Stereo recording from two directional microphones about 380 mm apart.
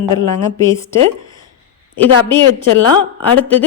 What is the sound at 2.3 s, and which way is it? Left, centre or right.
A woman's voice, centre.